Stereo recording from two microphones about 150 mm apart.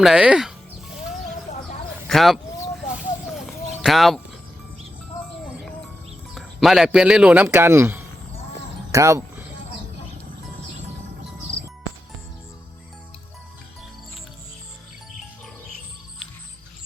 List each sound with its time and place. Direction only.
0.0 s music: 5° right (ahead or behind)
2.0 s speech: centre (ahead or behind)
3.3 s a sound: centre (ahead or behind)
6.3 s a man's voice: centre (ahead or behind); by 9.2 s 20° right (ahead or behind)